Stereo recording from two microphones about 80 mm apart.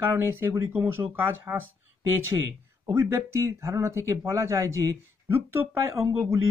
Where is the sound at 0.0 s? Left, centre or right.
Right.